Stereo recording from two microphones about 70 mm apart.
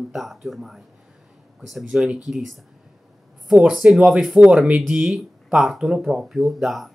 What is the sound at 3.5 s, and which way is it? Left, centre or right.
Speech, centre.